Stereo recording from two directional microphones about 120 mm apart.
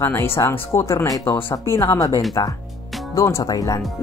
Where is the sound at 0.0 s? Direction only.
20° left (ahead or behind).